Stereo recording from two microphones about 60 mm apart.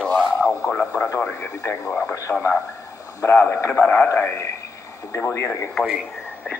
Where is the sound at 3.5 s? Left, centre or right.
Left.